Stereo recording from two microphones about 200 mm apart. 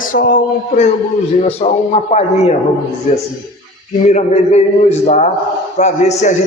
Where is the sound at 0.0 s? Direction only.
40° left (ahead or behind).